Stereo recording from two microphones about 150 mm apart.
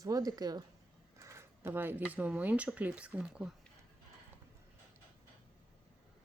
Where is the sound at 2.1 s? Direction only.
10° right (ahead or behind).